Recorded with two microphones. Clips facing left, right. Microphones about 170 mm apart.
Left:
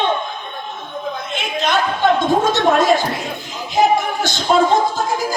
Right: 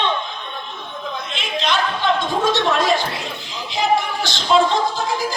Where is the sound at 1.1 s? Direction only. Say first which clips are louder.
Left 2 dB; 50° left (ahead or behind).